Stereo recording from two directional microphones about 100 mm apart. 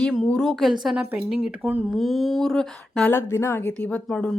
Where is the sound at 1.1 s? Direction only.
15° right (ahead or behind).